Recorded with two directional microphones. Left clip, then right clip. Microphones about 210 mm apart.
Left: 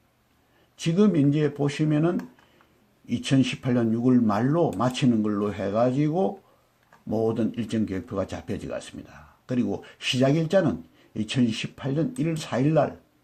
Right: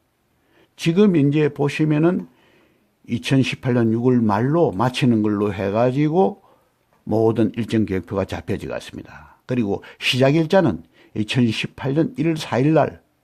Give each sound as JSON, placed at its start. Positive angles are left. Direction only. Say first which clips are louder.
{"t": 0.8, "sound": "speech", "louder": "right 6 dB", "side_deg": -40}